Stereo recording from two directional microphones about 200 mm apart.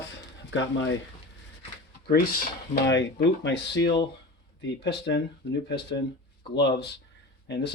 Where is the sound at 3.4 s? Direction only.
60° left (ahead or behind).